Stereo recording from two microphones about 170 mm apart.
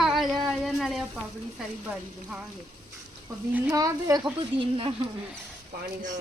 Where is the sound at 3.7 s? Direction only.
20° right (ahead or behind).